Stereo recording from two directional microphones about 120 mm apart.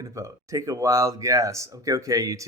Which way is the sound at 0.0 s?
25° right (ahead or behind).